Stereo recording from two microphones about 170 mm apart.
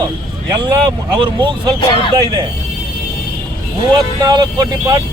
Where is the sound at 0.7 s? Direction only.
30° right (ahead or behind).